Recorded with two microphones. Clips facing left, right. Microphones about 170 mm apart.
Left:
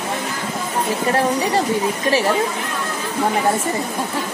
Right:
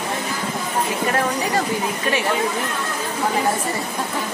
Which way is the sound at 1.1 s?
30° left (ahead or behind).